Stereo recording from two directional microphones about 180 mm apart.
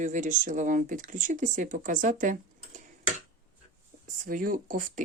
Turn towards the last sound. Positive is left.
turn(degrees=-50)  # may be behind; listen again after turning